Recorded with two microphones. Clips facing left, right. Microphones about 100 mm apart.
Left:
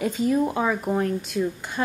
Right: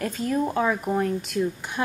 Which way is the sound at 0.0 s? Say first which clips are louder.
Left 3 dB; 5° left (ahead or behind).